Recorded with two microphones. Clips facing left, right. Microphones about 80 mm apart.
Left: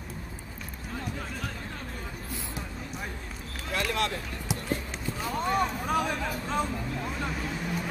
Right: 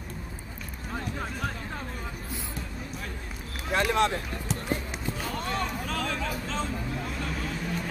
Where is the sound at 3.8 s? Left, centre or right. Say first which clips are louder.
Right 5 dB; right.